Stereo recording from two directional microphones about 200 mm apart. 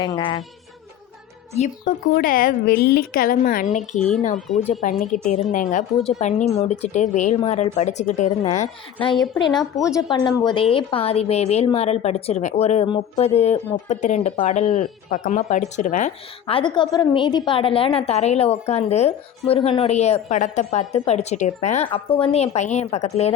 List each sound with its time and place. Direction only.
0.0 s a woman's voice: 20° left (ahead or behind)
1.5 s a woman's voice: 35° left (ahead or behind)
2.0 s a woman's voice: 45° left (ahead or behind)
5.1 s a woman's voice: 40° left (ahead or behind)
9.1 s speech: centre (ahead or behind)
9.8 s a woman's voice: 20° left (ahead or behind)